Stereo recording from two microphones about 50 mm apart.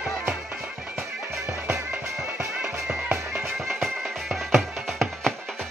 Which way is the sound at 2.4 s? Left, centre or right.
Centre.